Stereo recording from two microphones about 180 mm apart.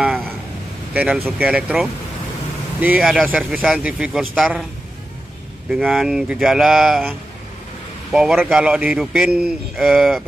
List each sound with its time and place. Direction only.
0.0 s a sound: centre (ahead or behind)
0.9 s a man's voice: 5° right (ahead or behind)
5.7 s a man's voice: centre (ahead or behind)